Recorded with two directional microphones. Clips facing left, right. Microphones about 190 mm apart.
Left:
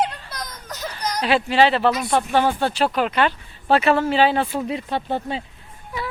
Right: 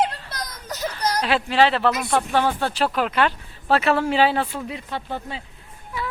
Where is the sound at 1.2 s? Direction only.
Centre (ahead or behind).